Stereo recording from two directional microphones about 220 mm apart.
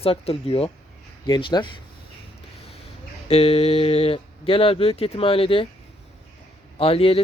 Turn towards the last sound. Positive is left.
turn(degrees=25)  # may be behind; listen again after turning